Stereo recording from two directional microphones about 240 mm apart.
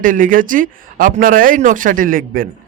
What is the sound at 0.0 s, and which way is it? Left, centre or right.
A man's voice, right.